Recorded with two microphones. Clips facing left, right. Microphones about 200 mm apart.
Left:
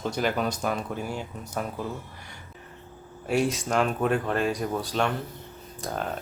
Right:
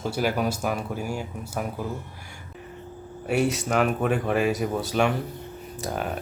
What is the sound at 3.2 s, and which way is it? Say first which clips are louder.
Speech: right 1 dB; 5° right (ahead or behind).